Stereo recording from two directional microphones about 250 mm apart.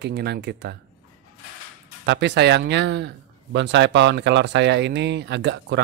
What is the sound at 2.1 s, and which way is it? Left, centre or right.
Speech, right.